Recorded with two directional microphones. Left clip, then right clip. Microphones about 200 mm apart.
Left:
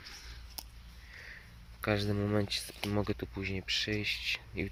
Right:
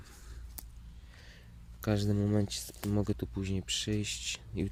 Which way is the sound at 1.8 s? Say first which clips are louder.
Left 1 dB; 25° right (ahead or behind).